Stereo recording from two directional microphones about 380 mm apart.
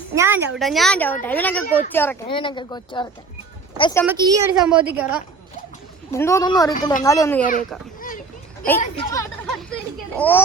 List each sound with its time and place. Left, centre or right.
0.1 s a woman's voice: centre
4.0 s a woman's voice: centre
6.1 s speech: centre
6.7 s speech: left
7.0 s speech: centre
8.8 s a woman's voice: centre